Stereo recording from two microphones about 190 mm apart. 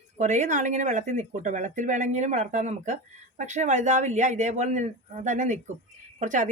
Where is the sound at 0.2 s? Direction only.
40° right (ahead or behind).